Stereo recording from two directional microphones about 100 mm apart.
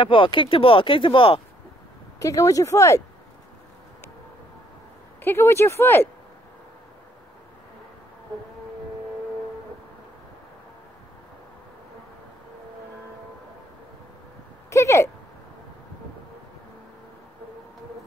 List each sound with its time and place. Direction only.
0.0 s speech: 60° left (ahead or behind)
2.1 s speech: 35° left (ahead or behind)
5.2 s speech: 25° left (ahead or behind)
14.7 s a sound: 30° left (ahead or behind)